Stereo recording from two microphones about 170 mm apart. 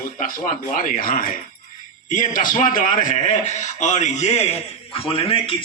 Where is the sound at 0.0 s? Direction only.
55° left (ahead or behind).